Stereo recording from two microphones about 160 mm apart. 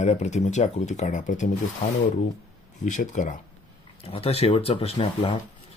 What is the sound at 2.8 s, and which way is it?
Speech, 50° left (ahead or behind).